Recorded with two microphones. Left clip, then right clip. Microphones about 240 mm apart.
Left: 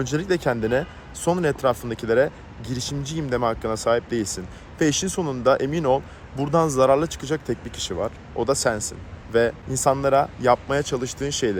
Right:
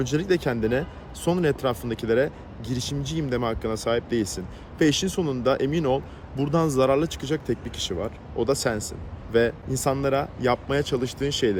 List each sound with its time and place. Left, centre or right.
0.0 s speech: centre